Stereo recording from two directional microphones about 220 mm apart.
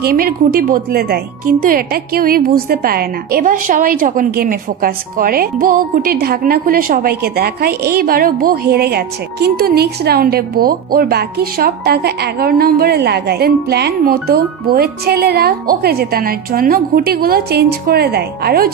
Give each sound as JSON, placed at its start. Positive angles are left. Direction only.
{"t": 0.0, "sound": "a woman's voice", "side_deg": -40}